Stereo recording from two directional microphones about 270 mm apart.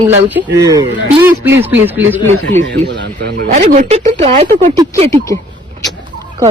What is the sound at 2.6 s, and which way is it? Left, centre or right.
Speech, right.